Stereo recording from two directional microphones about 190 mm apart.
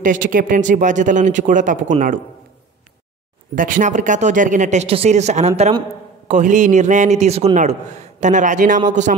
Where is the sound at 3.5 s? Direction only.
45° right (ahead or behind).